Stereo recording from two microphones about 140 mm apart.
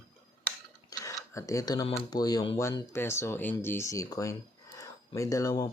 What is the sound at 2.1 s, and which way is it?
Speech, 30° left (ahead or behind).